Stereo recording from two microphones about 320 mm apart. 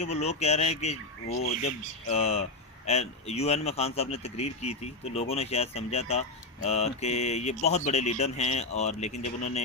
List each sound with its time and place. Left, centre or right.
0.0 s a man's voice: left
2.0 s a man's voice: centre